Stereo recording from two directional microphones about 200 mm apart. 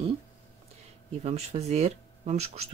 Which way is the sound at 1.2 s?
35° right (ahead or behind).